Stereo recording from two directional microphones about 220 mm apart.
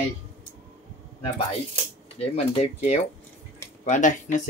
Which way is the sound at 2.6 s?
30° left (ahead or behind).